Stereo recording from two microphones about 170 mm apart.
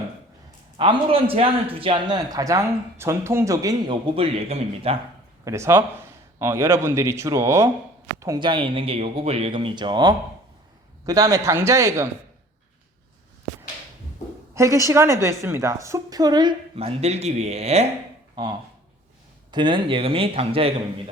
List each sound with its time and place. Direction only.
0.8 s a woman's voice: 30° right (ahead or behind)
4.1 s speech: 35° right (ahead or behind)
5.5 s a woman's voice: 15° right (ahead or behind)
14.5 s a woman's voice: 20° right (ahead or behind); by 17.8 s 40° right (ahead or behind)
19.5 s speech: 25° right (ahead or behind)